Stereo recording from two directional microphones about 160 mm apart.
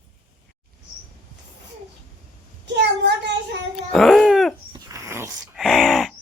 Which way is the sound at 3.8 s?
Centre (ahead or behind).